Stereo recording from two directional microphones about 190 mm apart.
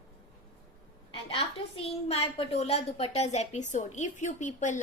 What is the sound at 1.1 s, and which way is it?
A woman's voice, 30° left (ahead or behind).